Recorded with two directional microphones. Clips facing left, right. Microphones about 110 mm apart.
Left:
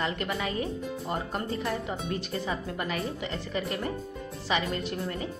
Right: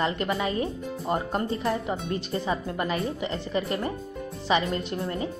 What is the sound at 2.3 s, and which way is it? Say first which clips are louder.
Speech: right 4 dB; 30° right (ahead or behind).